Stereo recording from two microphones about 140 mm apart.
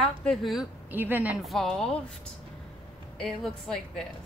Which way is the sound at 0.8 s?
15° right (ahead or behind).